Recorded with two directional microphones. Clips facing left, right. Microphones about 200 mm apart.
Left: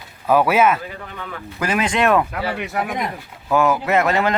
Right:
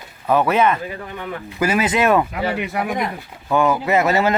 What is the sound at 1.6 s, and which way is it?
Speech, 5° right (ahead or behind).